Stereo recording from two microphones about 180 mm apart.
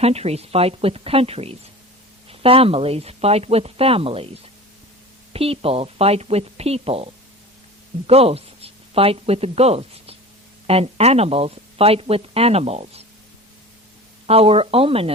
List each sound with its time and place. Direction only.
0.0 s speech: 35° right (ahead or behind)
5.3 s speech: 30° right (ahead or behind)
14.3 s speech: 35° right (ahead or behind)